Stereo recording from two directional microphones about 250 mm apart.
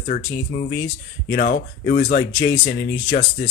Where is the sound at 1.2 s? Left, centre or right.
Left.